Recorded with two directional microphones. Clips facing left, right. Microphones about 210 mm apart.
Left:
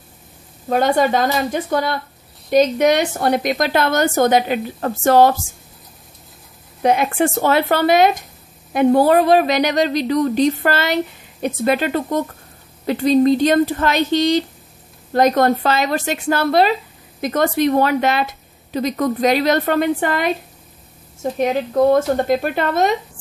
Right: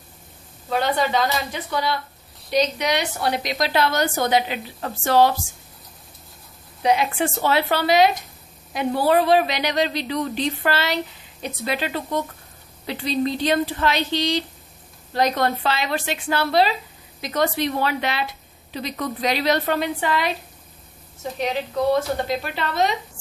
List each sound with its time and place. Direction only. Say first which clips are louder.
0.7 s a woman's voice: left 6 dB; 50° left (ahead or behind)
6.8 s a woman's voice: left 4 dB; 50° left (ahead or behind)